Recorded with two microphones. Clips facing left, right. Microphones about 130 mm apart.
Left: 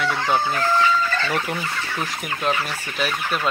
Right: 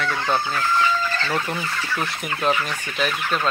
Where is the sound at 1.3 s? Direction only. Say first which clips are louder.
Even; 10° left (ahead or behind).